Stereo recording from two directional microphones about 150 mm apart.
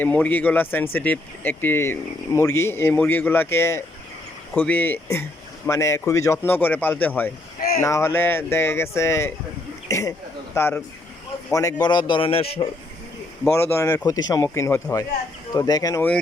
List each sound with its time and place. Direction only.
0.0 s speech: 10° left (ahead or behind)
11.5 s a man's voice: 25° left (ahead or behind)
13.5 s speech: 15° left (ahead or behind)